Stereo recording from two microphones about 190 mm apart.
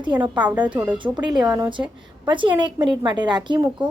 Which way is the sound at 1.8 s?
25° right (ahead or behind).